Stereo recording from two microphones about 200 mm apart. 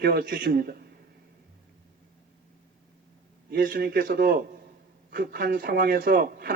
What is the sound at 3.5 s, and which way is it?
Speech, 45° right (ahead or behind).